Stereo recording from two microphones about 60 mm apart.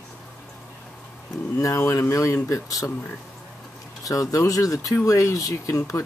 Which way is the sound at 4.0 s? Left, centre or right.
Left.